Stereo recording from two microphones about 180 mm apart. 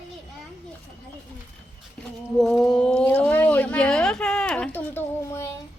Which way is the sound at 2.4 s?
Centre (ahead or behind).